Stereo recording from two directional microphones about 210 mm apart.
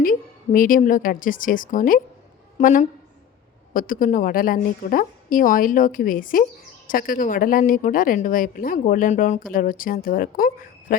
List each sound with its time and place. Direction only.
0.0 s a woman's voice: 40° left (ahead or behind)